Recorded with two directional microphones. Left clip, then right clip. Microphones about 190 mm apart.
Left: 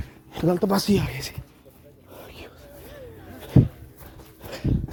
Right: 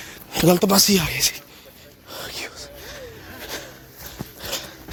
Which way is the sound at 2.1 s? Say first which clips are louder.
Right 11 dB; 5° right (ahead or behind).